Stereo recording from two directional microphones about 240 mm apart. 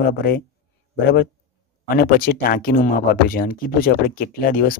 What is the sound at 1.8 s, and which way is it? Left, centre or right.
Speech, left.